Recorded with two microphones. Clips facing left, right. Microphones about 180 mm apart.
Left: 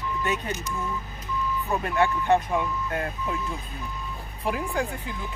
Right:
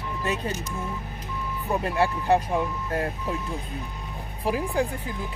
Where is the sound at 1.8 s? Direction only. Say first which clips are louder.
Even; 30° right (ahead or behind).